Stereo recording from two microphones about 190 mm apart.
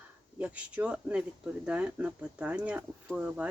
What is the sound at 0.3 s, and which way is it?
Speech, 5° right (ahead or behind).